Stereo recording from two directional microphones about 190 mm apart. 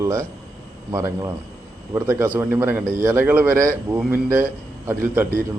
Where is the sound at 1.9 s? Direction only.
15° right (ahead or behind).